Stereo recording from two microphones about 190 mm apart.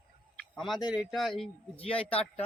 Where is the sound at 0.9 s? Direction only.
5° right (ahead or behind).